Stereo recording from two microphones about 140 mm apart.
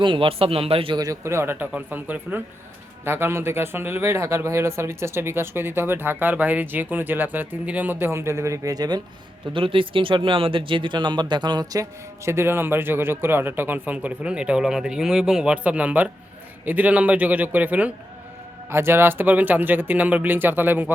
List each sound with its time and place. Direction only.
0.0 s a man's voice: 35° right (ahead or behind)
0.9 s speech: 25° right (ahead or behind)